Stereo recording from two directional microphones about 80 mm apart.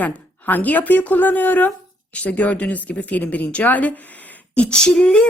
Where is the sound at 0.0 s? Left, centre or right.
Left.